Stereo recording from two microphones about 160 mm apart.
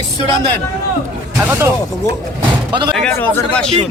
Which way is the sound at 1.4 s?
15° right (ahead or behind).